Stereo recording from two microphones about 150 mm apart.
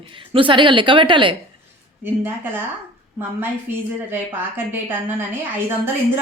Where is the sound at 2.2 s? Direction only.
15° right (ahead or behind).